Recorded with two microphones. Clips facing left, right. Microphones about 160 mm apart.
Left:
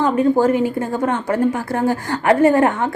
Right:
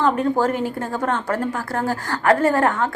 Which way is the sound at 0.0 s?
10° left (ahead or behind).